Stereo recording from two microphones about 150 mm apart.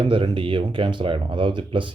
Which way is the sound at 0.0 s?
35° right (ahead or behind).